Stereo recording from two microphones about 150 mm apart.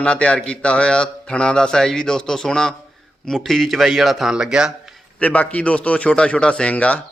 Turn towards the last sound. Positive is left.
turn(degrees=10)  # may be behind; listen again after turning